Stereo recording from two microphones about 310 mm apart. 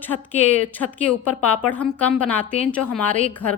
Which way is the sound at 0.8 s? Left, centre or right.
Left.